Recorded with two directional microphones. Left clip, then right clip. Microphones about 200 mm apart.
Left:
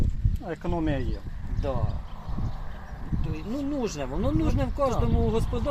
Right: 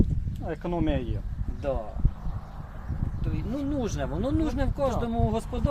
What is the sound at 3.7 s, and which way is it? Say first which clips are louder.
Speech: left 1 dB; 5° right (ahead or behind).